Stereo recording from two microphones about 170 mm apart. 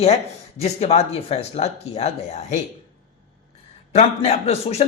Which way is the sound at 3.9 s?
40° left (ahead or behind).